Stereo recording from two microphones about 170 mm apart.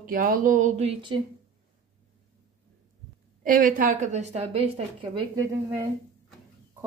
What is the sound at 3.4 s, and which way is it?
A woman's voice, 55° right (ahead or behind).